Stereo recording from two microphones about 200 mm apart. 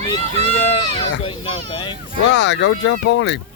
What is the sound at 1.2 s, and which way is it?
Speech, 25° left (ahead or behind).